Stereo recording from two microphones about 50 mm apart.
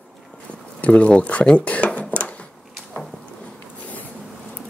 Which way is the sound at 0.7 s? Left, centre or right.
Left.